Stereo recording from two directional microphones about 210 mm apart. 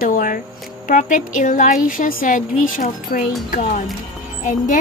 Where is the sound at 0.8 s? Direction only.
35° left (ahead or behind).